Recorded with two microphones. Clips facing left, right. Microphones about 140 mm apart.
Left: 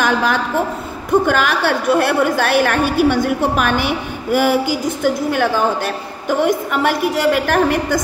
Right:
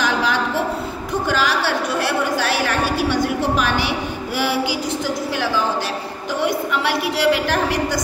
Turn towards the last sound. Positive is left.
turn(degrees=50)  # may be behind; listen again after turning